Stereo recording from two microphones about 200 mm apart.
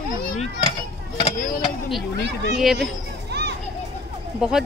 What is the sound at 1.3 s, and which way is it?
Vehicle, 40° left (ahead or behind).